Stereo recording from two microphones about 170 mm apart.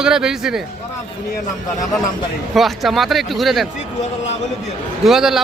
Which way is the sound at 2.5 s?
Centre (ahead or behind).